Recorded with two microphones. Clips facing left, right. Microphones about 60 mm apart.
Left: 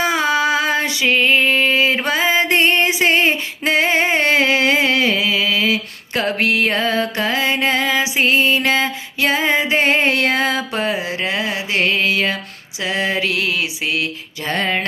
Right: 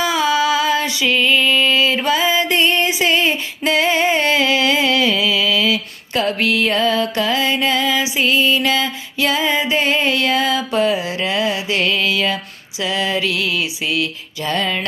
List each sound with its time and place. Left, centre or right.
0.0 s female singing: left
12.8 s mantra: left